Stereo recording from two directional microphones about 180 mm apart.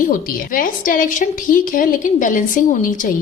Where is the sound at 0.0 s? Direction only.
50° left (ahead or behind).